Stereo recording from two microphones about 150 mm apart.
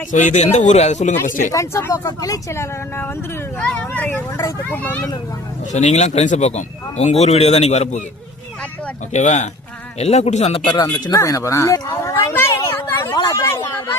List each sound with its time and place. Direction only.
0.1 s speech: 55° left (ahead or behind)
1.5 s speech: 20° left (ahead or behind)
5.7 s speech: 50° left (ahead or behind)
9.1 s speech: 50° left (ahead or behind)
11.0 s speech: 20° left (ahead or behind)
13.1 s a sound: 25° left (ahead or behind)